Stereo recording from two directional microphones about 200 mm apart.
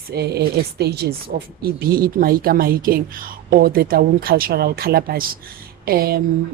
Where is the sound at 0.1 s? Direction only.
55° right (ahead or behind).